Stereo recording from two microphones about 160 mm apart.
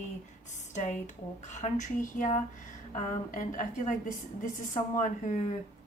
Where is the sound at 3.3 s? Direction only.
55° left (ahead or behind).